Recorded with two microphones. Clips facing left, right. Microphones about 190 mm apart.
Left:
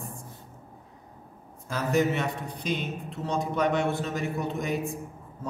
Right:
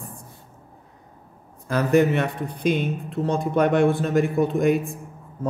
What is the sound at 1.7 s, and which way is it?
Speech, 60° right (ahead or behind).